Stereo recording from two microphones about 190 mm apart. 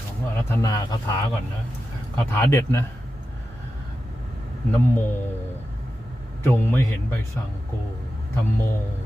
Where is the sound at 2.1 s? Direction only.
15° left (ahead or behind).